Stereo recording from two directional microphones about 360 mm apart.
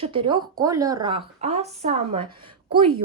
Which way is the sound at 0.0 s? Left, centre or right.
Centre.